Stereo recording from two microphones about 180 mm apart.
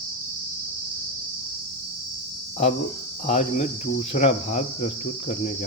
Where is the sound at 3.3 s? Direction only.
40° left (ahead or behind).